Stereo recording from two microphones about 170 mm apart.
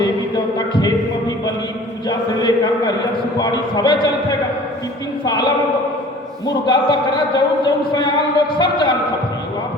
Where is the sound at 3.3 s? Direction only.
25° left (ahead or behind).